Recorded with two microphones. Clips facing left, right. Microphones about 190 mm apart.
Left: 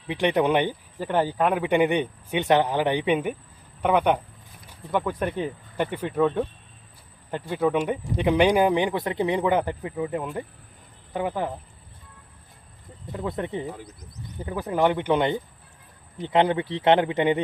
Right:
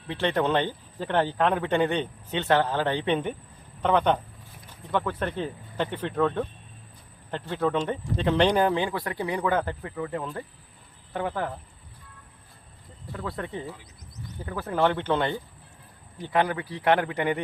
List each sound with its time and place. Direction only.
0.1 s speech: 15° left (ahead or behind)
13.1 s speech: 20° left (ahead or behind)